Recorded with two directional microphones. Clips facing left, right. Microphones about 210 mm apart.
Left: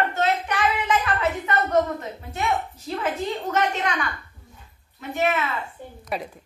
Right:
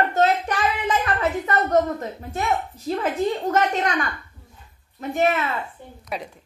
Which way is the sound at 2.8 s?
40° right (ahead or behind).